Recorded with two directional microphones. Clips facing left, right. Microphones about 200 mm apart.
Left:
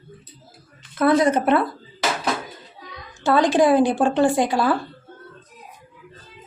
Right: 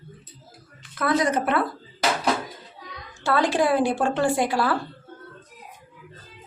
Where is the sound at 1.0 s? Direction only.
25° left (ahead or behind).